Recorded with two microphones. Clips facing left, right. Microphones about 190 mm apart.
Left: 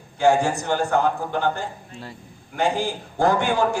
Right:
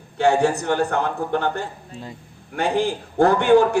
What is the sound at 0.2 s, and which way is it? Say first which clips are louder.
A man's voice: right 1 dB; 65° right (ahead or behind).